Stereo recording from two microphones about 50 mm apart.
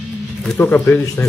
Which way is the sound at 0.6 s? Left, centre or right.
Left.